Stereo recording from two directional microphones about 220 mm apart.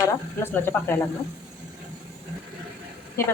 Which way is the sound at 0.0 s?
10° left (ahead or behind).